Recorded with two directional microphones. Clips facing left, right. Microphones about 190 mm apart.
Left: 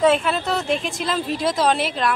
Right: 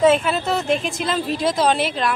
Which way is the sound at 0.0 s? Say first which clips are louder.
Right 2 dB; centre (ahead or behind).